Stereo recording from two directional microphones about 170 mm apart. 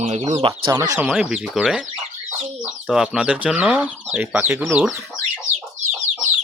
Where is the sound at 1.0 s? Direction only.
5° right (ahead or behind).